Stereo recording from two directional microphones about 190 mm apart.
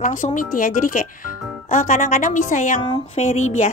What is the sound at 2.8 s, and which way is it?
Speech, 25° left (ahead or behind).